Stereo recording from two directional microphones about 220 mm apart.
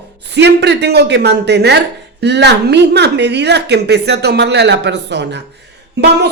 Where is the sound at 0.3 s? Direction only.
50° right (ahead or behind).